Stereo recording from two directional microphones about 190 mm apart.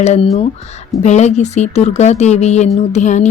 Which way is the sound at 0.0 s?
35° left (ahead or behind).